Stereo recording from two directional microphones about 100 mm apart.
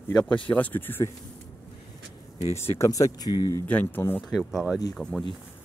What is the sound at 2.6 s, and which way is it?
Speech, 25° left (ahead or behind).